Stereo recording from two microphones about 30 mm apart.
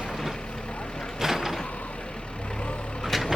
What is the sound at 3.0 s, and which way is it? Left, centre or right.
Vehicle, centre.